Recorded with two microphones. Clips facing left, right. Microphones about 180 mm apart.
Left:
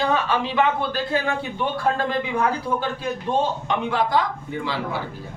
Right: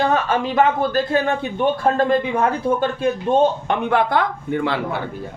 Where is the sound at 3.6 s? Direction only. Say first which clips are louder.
Right 4 dB; 60° right (ahead or behind).